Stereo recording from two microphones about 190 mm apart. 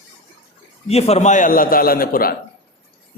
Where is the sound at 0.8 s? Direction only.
35° left (ahead or behind).